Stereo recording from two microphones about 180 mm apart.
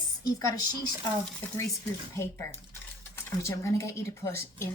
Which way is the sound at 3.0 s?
15° left (ahead or behind).